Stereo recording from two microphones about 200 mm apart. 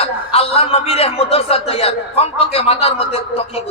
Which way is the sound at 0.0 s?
30° left (ahead or behind).